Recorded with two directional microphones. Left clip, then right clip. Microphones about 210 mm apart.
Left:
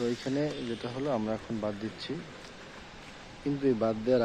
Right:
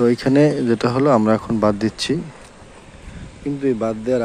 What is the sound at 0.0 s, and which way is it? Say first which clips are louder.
Speech: right 16 dB; 30° right (ahead or behind).